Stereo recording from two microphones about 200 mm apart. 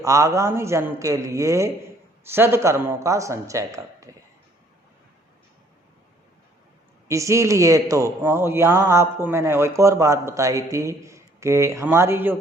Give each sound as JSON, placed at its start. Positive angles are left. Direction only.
{"t": 0.0, "sound": "a man's voice", "side_deg": -15}
{"t": 7.1, "sound": "a man's voice", "side_deg": -15}